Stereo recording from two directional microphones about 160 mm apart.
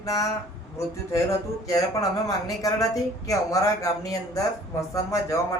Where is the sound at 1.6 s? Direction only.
20° left (ahead or behind).